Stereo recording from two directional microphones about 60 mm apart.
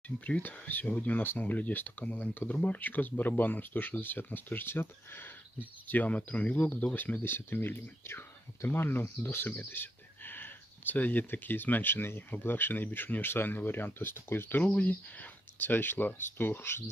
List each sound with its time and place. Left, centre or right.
0.3 s speech: left
5.9 s speech: left
14.6 s speech: left